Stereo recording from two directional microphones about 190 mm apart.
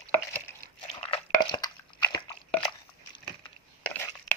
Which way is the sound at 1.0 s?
25° left (ahead or behind).